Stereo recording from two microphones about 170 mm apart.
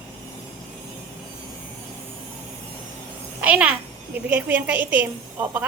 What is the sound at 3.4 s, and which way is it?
A woman's voice, 10° right (ahead or behind).